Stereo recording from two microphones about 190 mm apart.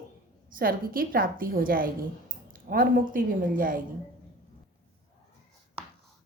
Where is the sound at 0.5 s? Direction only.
50° right (ahead or behind).